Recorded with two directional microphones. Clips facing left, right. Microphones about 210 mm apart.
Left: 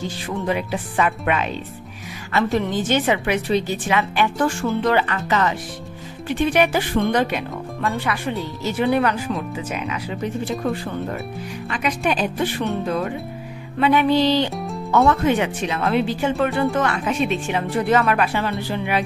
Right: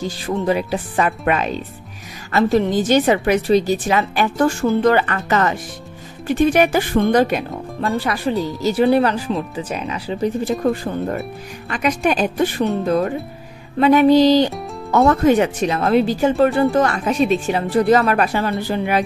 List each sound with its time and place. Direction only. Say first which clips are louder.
0.3 s a woman's voice: right 4 dB; 35° right (ahead or behind)
11.7 s a woman's voice: right 4 dB; 45° right (ahead or behind)